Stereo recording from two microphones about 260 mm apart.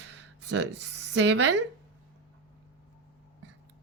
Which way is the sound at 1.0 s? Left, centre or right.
Right.